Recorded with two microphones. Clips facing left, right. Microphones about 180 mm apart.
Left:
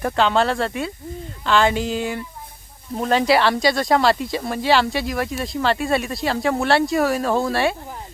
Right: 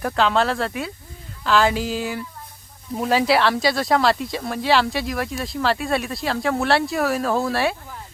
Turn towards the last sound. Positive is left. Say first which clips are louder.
# left 1 dB
turn(degrees=0)  # may be behind; listen again after turning